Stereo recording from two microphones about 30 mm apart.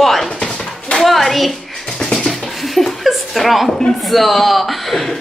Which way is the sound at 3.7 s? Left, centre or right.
Centre.